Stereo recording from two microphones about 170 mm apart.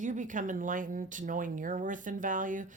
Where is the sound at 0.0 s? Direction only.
45° right (ahead or behind).